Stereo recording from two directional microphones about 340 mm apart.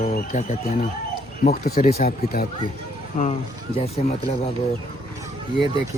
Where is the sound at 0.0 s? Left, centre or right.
Left.